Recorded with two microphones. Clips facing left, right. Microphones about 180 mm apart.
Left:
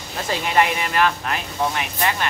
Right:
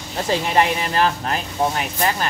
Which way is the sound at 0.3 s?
30° right (ahead or behind).